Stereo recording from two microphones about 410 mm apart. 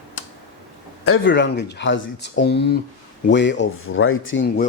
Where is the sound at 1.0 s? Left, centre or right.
Left.